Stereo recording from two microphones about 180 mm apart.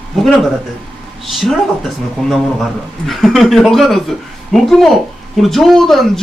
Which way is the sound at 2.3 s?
Centre (ahead or behind).